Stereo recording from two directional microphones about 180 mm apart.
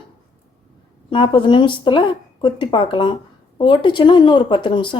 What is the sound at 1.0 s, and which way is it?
Speech, 25° left (ahead or behind).